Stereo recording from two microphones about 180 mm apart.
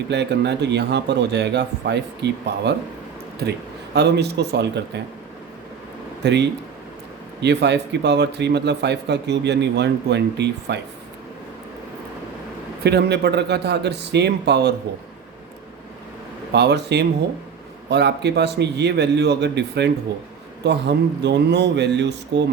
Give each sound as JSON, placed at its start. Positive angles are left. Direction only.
{"t": 0.1, "sound": "a man's voice", "side_deg": -70}
{"t": 6.2, "sound": "speech", "side_deg": -70}
{"t": 12.8, "sound": "speech", "side_deg": -65}
{"t": 16.5, "sound": "speech", "side_deg": -70}